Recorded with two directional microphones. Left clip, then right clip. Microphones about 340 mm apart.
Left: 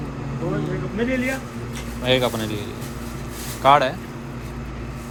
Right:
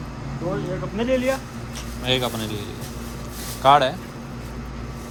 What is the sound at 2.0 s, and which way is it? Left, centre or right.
Speech, centre.